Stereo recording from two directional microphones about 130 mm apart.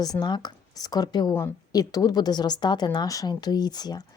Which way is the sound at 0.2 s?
35° left (ahead or behind).